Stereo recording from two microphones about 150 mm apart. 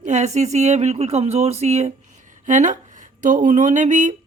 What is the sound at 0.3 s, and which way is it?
Speech, 50° right (ahead or behind).